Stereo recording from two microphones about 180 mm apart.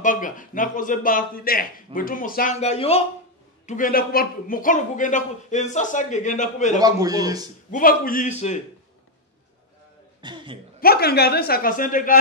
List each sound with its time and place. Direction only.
0.0 s a man's voice: 45° left (ahead or behind)
3.6 s a man's voice: 50° left (ahead or behind)
6.8 s speech: 20° right (ahead or behind)
7.7 s a man's voice: 50° left (ahead or behind)
10.2 s speech: 25° right (ahead or behind)
10.8 s a man's voice: 60° left (ahead or behind)